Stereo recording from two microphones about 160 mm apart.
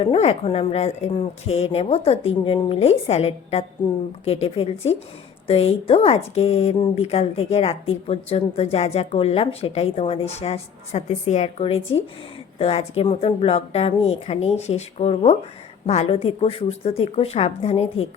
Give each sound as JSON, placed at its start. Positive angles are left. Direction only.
{"t": 0.0, "sound": "a woman's voice", "side_deg": 35}